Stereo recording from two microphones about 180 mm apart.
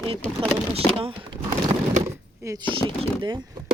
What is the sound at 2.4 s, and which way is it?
Speech, 25° right (ahead or behind).